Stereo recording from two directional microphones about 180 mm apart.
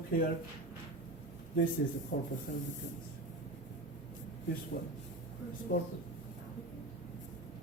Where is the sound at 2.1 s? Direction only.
55° left (ahead or behind).